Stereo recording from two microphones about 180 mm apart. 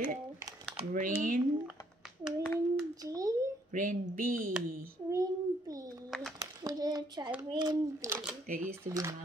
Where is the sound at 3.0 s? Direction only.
20° right (ahead or behind).